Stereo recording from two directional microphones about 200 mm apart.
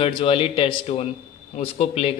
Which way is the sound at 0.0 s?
25° left (ahead or behind).